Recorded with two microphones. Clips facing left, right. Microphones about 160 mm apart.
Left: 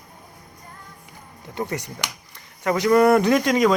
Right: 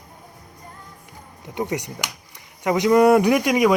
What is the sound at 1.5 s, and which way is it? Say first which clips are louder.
Speech: right 2 dB; 15° right (ahead or behind).